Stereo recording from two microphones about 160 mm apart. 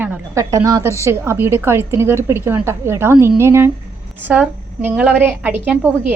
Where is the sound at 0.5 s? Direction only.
20° right (ahead or behind).